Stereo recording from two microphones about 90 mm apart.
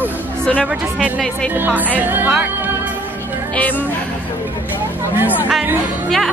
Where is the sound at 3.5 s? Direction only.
20° left (ahead or behind).